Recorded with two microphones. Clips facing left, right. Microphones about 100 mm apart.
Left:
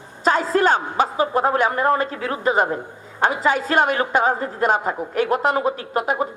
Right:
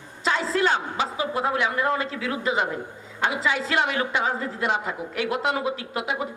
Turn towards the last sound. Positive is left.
turn(degrees=45)  # may be behind; listen again after turning